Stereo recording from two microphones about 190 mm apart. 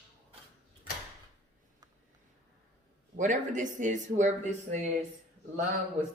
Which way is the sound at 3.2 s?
40° right (ahead or behind).